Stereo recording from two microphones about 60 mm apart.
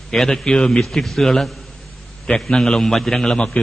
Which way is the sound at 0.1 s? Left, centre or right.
Centre.